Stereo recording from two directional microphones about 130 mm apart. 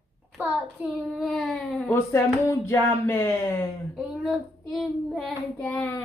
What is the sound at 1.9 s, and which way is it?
Speech, 20° left (ahead or behind).